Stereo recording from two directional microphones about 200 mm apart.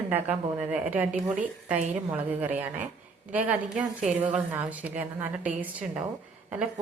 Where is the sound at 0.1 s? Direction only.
5° right (ahead or behind).